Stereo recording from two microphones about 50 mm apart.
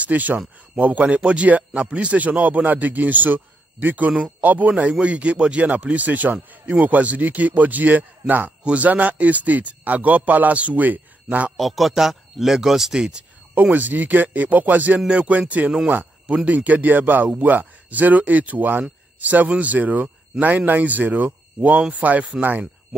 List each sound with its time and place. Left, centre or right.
0.0 s a man's voice: right
11.5 s speech: centre
13.6 s a man's voice: right